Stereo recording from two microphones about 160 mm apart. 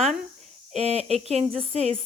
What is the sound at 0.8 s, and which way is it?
Speech, 40° right (ahead or behind).